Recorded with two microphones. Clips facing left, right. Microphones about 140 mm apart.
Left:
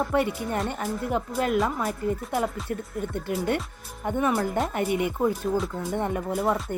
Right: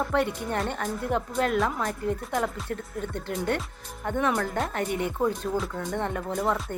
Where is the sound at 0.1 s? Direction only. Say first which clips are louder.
Left 1 dB; 5° left (ahead or behind).